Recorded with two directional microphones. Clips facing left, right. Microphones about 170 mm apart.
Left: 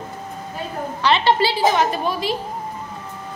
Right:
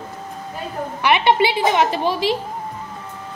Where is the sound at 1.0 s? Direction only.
15° right (ahead or behind).